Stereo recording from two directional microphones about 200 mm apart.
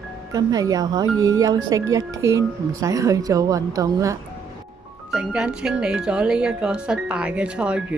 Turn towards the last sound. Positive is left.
turn(degrees=-5)  # may be behind; listen again after turning